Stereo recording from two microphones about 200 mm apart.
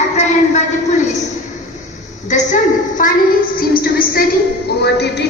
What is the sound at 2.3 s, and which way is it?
A woman's voice, 40° left (ahead or behind).